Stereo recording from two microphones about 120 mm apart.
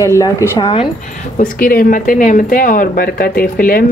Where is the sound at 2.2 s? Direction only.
90° left.